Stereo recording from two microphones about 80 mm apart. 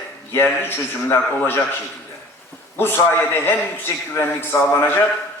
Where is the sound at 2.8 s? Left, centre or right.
Left.